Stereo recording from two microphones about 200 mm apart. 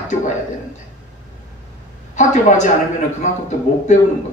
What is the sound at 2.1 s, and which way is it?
Speech, 35° left (ahead or behind).